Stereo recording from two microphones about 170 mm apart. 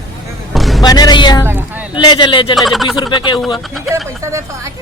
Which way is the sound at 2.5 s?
Centre (ahead or behind).